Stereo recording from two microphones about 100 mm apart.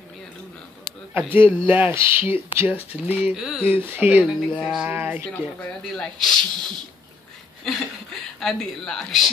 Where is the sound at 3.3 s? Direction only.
Centre (ahead or behind).